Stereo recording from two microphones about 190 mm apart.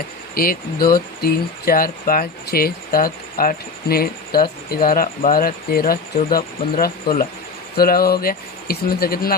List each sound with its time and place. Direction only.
0.3 s speech: 50° left (ahead or behind)